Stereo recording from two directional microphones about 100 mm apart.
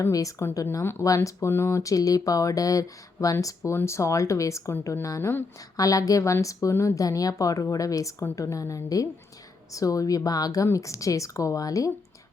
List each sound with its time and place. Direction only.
0.1 s speech: 35° left (ahead or behind)